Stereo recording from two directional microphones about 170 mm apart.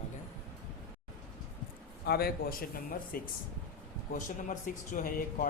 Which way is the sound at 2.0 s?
65° left (ahead or behind).